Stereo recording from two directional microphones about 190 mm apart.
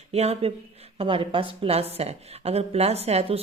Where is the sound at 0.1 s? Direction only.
35° right (ahead or behind).